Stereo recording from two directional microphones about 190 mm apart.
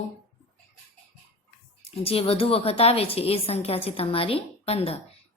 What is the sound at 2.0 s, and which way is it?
A woman's voice, 30° left (ahead or behind).